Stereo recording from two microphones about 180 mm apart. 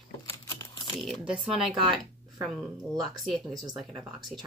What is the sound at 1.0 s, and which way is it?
Speech, centre (ahead or behind).